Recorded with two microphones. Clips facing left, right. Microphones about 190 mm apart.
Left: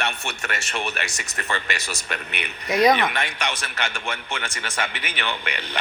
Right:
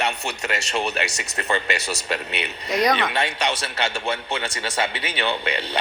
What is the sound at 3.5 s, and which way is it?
A man's voice, 35° right (ahead or behind).